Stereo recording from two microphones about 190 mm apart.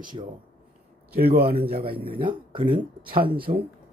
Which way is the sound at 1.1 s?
55° right (ahead or behind).